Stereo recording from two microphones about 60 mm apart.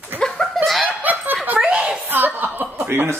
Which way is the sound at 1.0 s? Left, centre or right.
Right.